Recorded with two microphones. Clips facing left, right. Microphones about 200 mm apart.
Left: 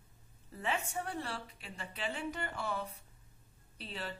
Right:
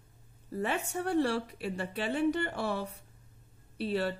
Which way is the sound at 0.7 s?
70° right (ahead or behind).